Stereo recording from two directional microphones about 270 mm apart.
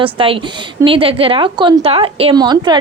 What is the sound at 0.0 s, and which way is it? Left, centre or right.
A woman's voice, centre.